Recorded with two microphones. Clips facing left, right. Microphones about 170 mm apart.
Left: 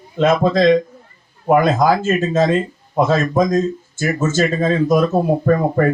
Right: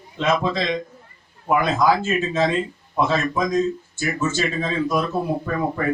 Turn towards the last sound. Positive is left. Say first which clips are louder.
# left 8 dB
turn(degrees=50)  # may be behind; listen again after turning